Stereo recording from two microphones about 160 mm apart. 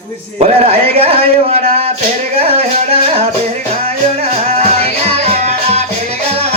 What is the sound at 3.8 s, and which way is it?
Music, 40° right (ahead or behind).